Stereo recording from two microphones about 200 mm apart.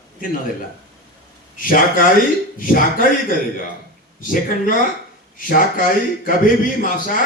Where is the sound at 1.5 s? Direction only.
45° left (ahead or behind).